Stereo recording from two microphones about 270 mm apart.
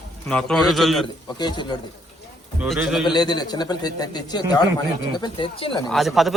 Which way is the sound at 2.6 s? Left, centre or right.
Centre.